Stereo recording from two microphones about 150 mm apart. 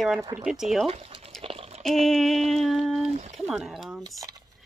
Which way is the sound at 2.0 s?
Centre (ahead or behind).